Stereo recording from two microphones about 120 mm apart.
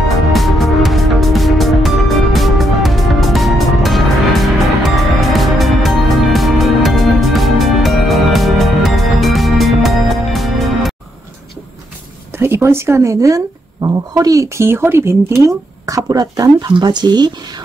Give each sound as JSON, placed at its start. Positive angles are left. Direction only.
{"t": 0.3, "sound": "music", "side_deg": 0}
{"t": 12.4, "sound": "speech", "side_deg": -20}